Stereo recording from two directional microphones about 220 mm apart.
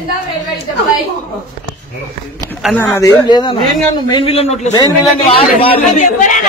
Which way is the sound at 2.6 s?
10° left (ahead or behind).